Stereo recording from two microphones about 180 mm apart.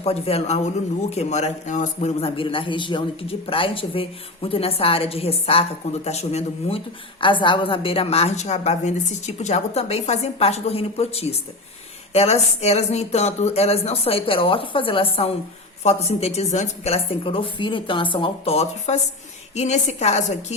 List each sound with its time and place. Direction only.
0.0 s a woman's voice: 35° left (ahead or behind)